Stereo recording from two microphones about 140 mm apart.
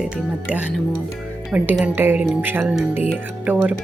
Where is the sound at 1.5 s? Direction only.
10° right (ahead or behind).